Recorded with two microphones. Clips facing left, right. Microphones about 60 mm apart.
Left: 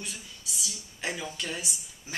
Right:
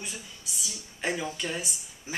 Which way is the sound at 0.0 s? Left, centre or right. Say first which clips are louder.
Right 1 dB; centre.